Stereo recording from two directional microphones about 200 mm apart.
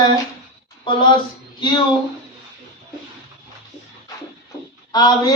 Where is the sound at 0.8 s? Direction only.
20° left (ahead or behind).